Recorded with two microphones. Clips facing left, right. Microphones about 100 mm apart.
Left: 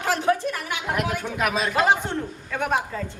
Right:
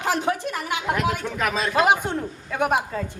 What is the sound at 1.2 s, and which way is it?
Speech, 10° left (ahead or behind).